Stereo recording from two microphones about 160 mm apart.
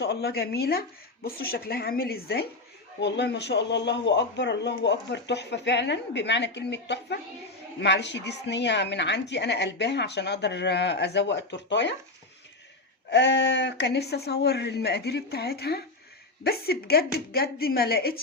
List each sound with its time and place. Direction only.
0.0 s speech: 90° left
3.0 s speech: 90° left
13.1 s speech: 90° left; by 18.2 s 75° left (ahead or behind)